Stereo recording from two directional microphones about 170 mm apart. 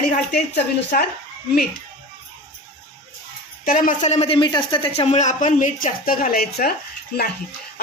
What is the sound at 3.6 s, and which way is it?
A woman's voice, 50° left (ahead or behind).